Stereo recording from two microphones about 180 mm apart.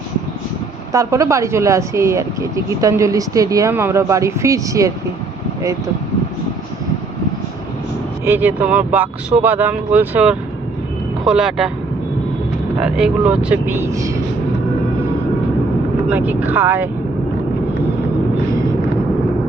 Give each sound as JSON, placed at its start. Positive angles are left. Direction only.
{"t": 0.9, "sound": "speech", "side_deg": -15}
{"t": 8.2, "sound": "speech", "side_deg": -10}
{"t": 12.8, "sound": "speech", "side_deg": -5}
{"t": 16.0, "sound": "speech", "side_deg": -10}